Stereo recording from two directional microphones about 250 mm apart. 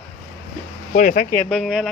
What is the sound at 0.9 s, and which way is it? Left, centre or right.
Speech, left.